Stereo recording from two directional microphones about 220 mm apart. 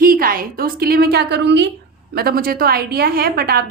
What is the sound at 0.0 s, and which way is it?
A woman's voice, 40° right (ahead or behind).